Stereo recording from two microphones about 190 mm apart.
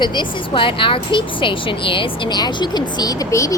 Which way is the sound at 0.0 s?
25° left (ahead or behind).